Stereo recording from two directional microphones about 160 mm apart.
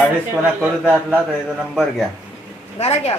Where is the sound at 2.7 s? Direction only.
40° left (ahead or behind).